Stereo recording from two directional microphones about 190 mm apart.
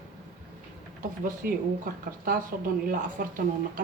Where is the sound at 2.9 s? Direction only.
45° right (ahead or behind).